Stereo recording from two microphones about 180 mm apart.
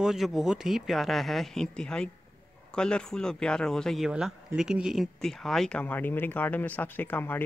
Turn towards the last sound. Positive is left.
turn(degrees=10)  # may be behind; listen again after turning